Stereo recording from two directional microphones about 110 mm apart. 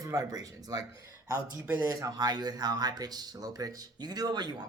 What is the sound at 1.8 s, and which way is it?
Speech, 30° right (ahead or behind).